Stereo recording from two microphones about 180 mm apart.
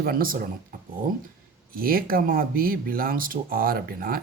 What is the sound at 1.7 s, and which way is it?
Speech, 55° right (ahead or behind).